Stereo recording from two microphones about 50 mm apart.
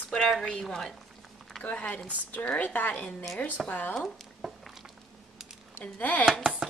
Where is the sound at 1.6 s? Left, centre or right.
Left.